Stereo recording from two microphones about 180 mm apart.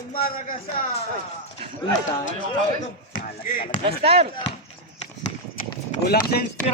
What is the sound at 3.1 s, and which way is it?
Speech, 50° left (ahead or behind).